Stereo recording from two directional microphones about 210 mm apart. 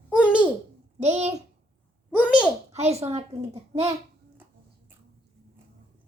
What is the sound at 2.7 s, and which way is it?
A child's voice, 30° right (ahead or behind).